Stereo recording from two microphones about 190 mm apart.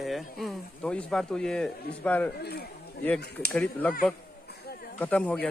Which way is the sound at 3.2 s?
55° left (ahead or behind).